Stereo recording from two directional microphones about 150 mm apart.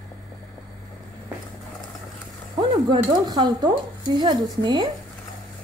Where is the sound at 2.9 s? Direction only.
30° right (ahead or behind).